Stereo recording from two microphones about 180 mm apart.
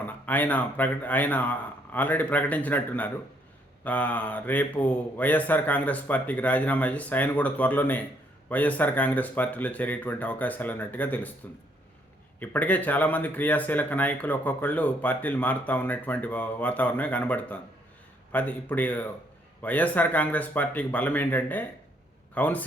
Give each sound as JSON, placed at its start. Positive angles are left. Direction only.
{"t": 0.0, "sound": "speech", "side_deg": 10}
{"t": 12.4, "sound": "speech", "side_deg": 10}